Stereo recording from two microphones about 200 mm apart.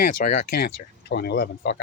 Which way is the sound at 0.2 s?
45° left (ahead or behind).